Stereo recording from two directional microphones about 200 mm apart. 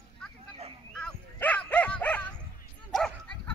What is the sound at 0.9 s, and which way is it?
Dog, 5° left (ahead or behind).